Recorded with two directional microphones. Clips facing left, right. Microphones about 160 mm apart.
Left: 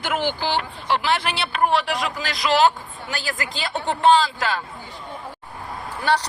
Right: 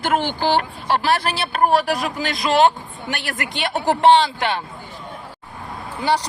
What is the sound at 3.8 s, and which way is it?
Speech, 35° right (ahead or behind).